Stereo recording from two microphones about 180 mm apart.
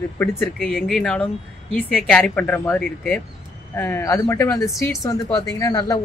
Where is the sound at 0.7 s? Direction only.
Centre (ahead or behind).